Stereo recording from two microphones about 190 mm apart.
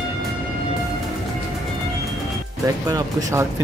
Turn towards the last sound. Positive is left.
turn(degrees=-20)  # may be behind; listen again after turning